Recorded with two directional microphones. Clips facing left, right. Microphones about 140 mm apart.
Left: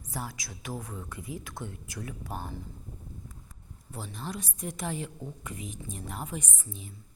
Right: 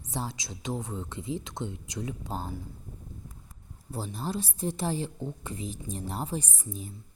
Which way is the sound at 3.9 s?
35° right (ahead or behind).